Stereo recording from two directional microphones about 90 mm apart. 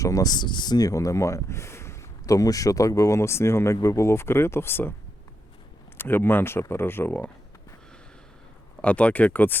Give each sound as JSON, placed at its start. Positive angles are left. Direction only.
{"t": 0.0, "sound": "speech", "side_deg": 40}
{"t": 6.0, "sound": "speech", "side_deg": 25}
{"t": 8.8, "sound": "speech", "side_deg": 15}